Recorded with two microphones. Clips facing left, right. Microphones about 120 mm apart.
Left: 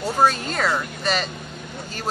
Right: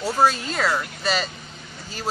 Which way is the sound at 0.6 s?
5° right (ahead or behind).